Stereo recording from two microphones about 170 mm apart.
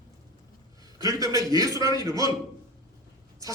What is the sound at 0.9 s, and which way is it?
A man's voice, 20° right (ahead or behind).